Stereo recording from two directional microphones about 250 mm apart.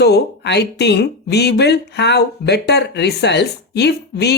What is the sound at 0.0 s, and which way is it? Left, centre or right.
Speech, left.